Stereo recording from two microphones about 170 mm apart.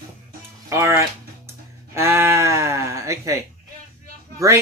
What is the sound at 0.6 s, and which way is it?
Speech, 15° right (ahead or behind).